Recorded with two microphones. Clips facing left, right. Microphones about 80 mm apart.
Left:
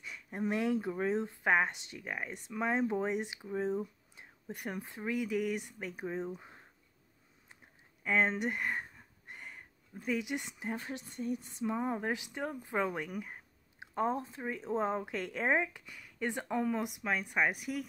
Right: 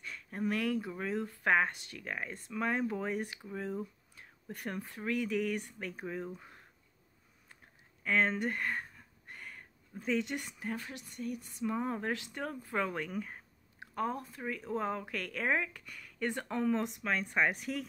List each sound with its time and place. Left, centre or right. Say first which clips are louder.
0.0 s speech: even; centre
8.0 s a sound: even; centre
9.9 s speech: right 1 dB; centre
13.9 s speech: left 3 dB; left